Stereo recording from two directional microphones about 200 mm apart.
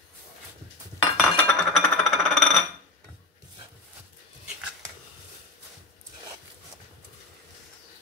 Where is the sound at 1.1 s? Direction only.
Centre (ahead or behind).